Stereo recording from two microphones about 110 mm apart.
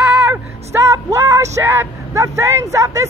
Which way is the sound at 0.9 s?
25° right (ahead or behind).